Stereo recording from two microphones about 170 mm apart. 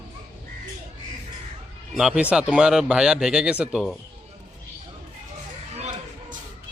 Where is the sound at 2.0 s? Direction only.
5° right (ahead or behind).